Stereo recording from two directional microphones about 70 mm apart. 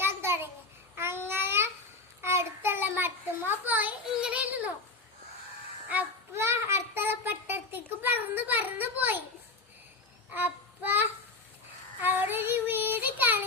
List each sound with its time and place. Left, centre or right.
0.0 s child singing: right
0.9 s babbling: right
2.2 s child singing: right
4.2 s a sound: centre
6.3 s a sound: right
10.3 s child singing: right